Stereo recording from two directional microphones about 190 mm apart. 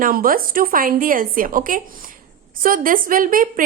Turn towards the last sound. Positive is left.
turn(degrees=-45)  # may be behind; listen again after turning